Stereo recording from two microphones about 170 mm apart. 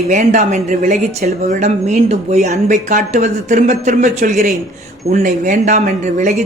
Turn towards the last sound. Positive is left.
turn(degrees=-45)  # may be behind; listen again after turning